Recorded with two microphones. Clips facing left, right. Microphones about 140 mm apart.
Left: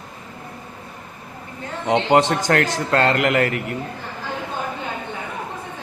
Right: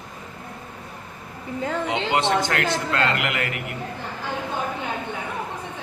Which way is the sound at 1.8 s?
40° left (ahead or behind).